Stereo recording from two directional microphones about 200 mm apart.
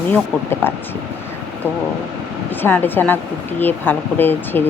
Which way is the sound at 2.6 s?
10° left (ahead or behind).